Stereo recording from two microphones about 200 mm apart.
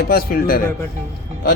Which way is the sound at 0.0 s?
50° left (ahead or behind).